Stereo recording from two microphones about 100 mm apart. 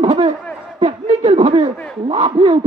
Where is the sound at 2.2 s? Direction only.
65° right (ahead or behind).